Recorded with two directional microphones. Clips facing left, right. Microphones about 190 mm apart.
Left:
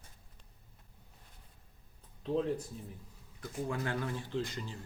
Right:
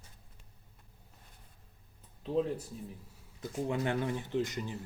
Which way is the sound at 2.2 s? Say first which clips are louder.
Right 1 dB; 5° right (ahead or behind).